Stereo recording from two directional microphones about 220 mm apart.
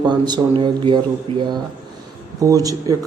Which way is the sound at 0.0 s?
20° right (ahead or behind).